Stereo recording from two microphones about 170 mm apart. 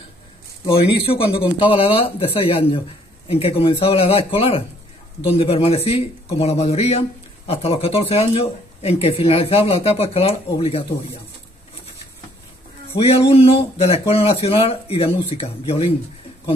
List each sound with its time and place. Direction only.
0.7 s speech: 35° left (ahead or behind)
12.9 s speech: 35° left (ahead or behind)